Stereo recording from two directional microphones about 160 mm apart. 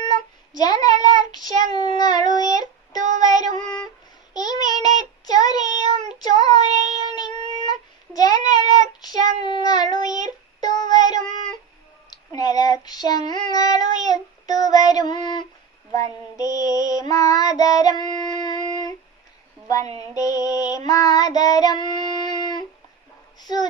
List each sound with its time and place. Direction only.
0.0 s child singing: 25° left (ahead or behind)
12.4 s child singing: 20° left (ahead or behind)
20.0 s child singing: 20° left (ahead or behind)
23.4 s a sound: 25° left (ahead or behind)